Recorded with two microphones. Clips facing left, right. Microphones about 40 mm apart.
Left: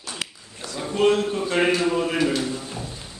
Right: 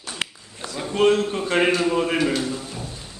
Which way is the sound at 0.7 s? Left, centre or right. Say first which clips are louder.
Even; centre.